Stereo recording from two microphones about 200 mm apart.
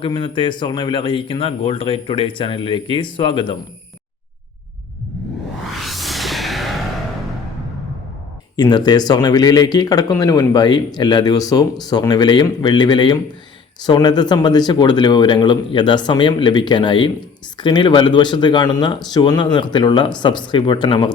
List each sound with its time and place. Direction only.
0.0 s speech: 25° left (ahead or behind)
5.7 s music: centre (ahead or behind)
8.5 s speech: 20° left (ahead or behind)